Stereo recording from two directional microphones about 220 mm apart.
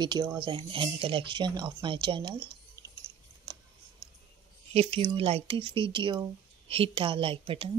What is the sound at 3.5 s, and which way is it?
Scissors, 20° right (ahead or behind).